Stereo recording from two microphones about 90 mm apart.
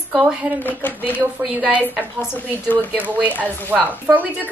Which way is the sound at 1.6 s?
15° right (ahead or behind).